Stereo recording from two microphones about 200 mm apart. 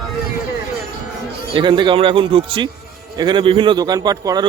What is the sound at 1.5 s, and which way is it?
A man's voice, 25° right (ahead or behind).